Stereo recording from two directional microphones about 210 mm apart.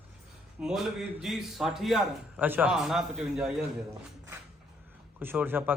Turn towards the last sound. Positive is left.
turn(degrees=-10)  # may be behind; listen again after turning